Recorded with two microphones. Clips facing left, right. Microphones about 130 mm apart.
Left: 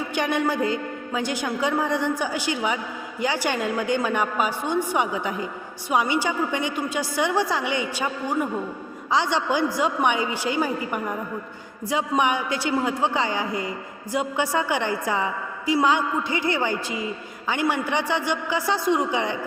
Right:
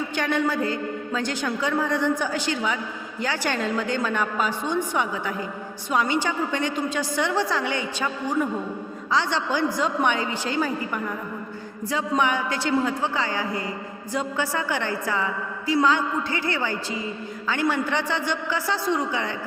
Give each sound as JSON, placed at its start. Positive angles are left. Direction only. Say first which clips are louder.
{"t": 0.1, "sound": "a man's voice", "louder": "left 2 dB", "side_deg": 15}